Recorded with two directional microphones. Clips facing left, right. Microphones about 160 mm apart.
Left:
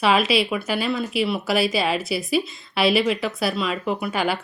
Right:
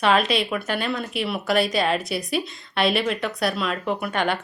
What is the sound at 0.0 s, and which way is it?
Speech, 5° left (ahead or behind).